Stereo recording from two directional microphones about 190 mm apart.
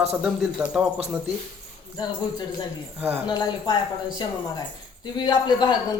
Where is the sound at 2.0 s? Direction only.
20° left (ahead or behind).